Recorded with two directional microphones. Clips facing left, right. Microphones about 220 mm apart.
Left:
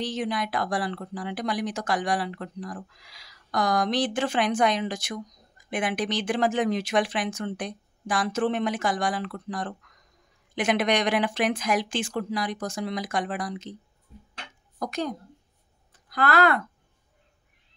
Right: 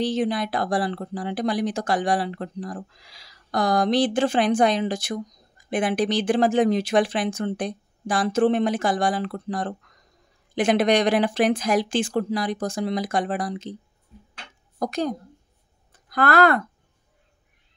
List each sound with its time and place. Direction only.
0.0 s speech: 30° right (ahead or behind)
14.8 s speech: 35° right (ahead or behind)
16.1 s speech: 50° right (ahead or behind)